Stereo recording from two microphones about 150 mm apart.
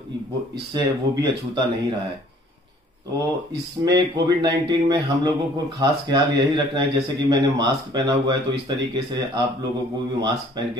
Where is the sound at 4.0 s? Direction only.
30° right (ahead or behind).